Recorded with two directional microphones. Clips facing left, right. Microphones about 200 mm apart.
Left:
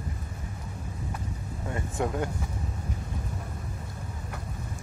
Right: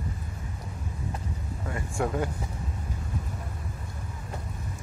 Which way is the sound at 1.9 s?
5° right (ahead or behind).